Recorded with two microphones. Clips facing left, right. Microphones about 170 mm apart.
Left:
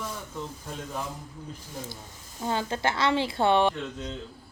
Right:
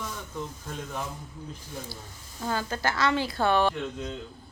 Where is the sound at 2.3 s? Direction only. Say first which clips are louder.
Left 1 dB; 25° left (ahead or behind).